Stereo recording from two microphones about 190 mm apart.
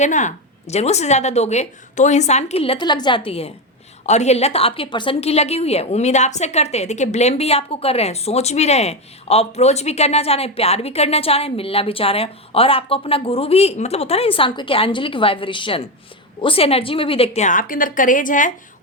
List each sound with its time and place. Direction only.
0.0 s a woman's voice: 40° left (ahead or behind)